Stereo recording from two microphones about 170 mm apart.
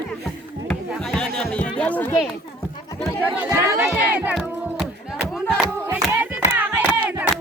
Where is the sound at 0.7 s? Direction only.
5° left (ahead or behind).